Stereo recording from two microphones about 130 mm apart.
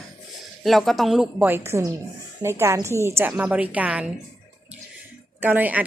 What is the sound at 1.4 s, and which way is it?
A woman's voice, 15° right (ahead or behind).